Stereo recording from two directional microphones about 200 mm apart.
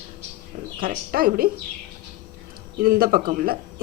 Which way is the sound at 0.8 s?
45° right (ahead or behind).